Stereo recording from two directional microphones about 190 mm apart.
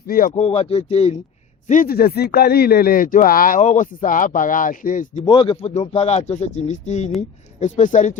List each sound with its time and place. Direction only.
0.1 s a man's voice: 45° left (ahead or behind)
0.4 s speech: 30° left (ahead or behind)
1.6 s a man's voice: 45° left (ahead or behind)
5.2 s speech: 25° left (ahead or behind)